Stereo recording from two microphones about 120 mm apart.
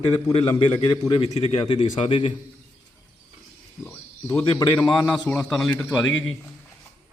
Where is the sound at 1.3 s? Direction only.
55° left (ahead or behind).